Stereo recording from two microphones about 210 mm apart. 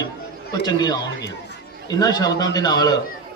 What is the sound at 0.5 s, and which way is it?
A man's voice, 20° left (ahead or behind).